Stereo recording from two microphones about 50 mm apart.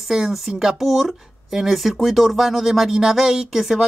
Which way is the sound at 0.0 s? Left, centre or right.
Centre.